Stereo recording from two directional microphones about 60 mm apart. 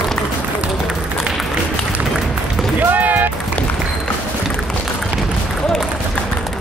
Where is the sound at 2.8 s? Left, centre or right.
Right.